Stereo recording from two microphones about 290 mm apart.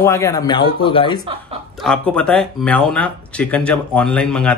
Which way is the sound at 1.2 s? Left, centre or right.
Centre.